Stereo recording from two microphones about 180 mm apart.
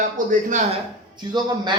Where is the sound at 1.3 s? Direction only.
25° right (ahead or behind).